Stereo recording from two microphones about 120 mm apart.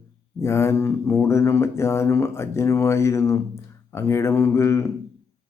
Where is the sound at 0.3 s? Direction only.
25° left (ahead or behind).